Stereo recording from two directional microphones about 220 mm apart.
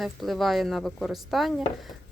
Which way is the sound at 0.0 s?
Centre (ahead or behind).